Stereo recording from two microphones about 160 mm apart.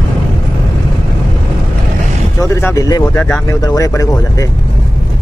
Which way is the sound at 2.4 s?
20° left (ahead or behind).